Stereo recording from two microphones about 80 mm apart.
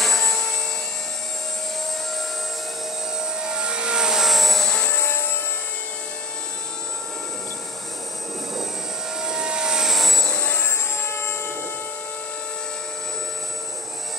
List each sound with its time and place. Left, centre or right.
0.0 s helicopter: centre
3.3 s vehicle: centre
4.8 s a sound: left
9.2 s vehicle: centre
10.4 s vehicle: left